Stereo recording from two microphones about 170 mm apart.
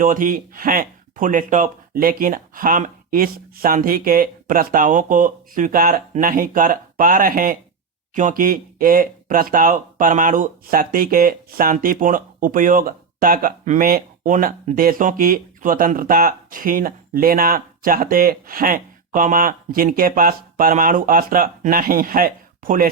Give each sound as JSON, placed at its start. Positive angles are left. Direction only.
{"t": 0.0, "sound": "speech", "side_deg": -55}